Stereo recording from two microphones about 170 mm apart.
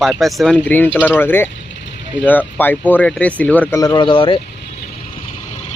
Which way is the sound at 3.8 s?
25° left (ahead or behind).